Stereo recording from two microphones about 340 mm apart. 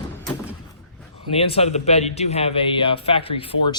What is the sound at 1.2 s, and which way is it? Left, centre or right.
A man's voice, centre.